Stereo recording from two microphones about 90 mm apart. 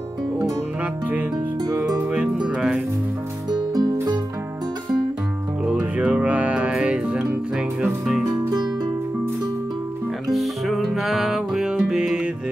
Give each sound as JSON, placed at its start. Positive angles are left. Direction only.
{"t": 1.8, "sound": "music", "side_deg": -15}
{"t": 3.4, "sound": "music", "side_deg": -50}
{"t": 5.7, "sound": "music", "side_deg": -15}
{"t": 10.3, "sound": "music", "side_deg": 0}